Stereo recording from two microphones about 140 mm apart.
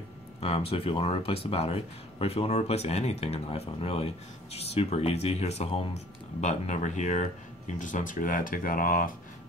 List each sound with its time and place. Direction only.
0.4 s speech: 45° left (ahead or behind); by 9.1 s 80° left